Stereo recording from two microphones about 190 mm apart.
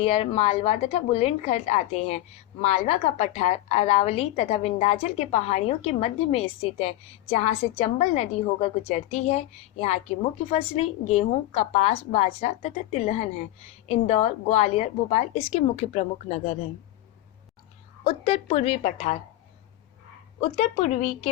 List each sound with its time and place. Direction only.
0.0 s a woman's voice: 30° left (ahead or behind)
18.0 s a woman's voice: 35° left (ahead or behind)
20.4 s a woman's voice: 30° left (ahead or behind)